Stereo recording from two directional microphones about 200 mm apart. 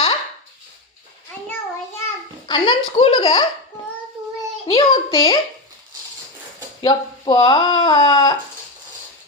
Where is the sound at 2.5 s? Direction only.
25° left (ahead or behind).